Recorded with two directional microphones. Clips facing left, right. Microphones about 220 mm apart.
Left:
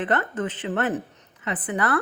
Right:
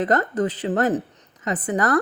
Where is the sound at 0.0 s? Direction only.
40° right (ahead or behind).